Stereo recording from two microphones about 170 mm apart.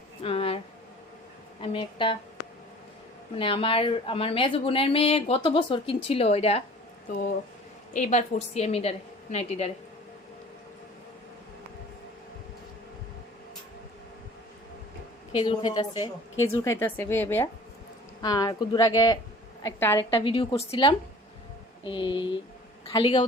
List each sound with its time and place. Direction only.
0.2 s a sound: 35° left (ahead or behind)
1.6 s speech: 30° left (ahead or behind)
3.3 s a woman's voice: 30° left (ahead or behind)
7.9 s a woman's voice: 45° left (ahead or behind)
15.4 s speech: 25° left (ahead or behind)
16.6 s a woman's voice: 15° left (ahead or behind)
20.1 s speech: 30° left (ahead or behind)